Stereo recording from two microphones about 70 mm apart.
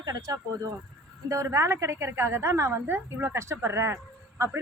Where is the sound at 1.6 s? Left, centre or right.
Right.